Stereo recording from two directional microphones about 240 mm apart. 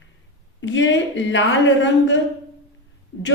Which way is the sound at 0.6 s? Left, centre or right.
Left.